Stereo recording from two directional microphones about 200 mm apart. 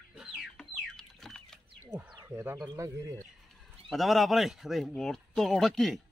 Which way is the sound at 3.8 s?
Centre (ahead or behind).